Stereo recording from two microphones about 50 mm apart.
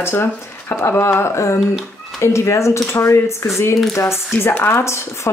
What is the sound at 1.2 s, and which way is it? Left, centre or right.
Speech, left.